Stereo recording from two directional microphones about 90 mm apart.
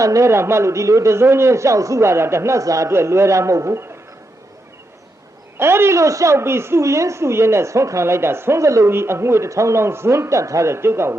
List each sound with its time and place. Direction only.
0.0 s a woman's voice: 35° right (ahead or behind)
5.5 s a woman's voice: 25° right (ahead or behind)